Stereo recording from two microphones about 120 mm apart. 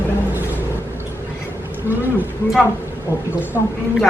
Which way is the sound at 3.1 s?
15° right (ahead or behind).